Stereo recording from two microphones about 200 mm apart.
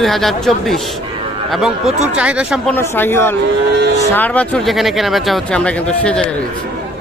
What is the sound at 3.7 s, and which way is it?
Speech, 60° right (ahead or behind).